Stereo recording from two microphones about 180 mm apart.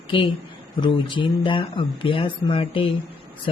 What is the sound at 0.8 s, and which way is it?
Speech, 25° left (ahead or behind).